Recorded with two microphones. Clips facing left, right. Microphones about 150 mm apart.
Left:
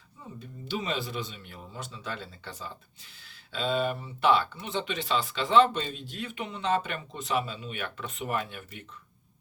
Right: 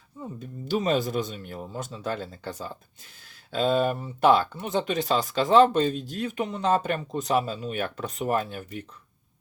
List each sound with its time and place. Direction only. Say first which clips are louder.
0.3 s speech: right 6 dB; 45° right (ahead or behind)